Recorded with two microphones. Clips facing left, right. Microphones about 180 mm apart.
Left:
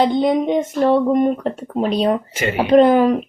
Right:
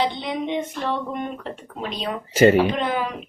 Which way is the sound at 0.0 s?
45° left (ahead or behind).